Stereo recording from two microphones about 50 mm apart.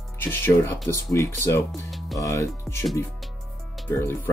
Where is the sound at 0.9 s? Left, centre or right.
Left.